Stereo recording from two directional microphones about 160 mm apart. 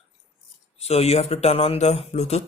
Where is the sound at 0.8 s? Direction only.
40° left (ahead or behind).